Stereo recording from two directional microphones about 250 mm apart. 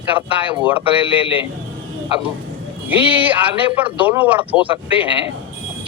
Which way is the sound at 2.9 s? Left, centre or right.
Centre.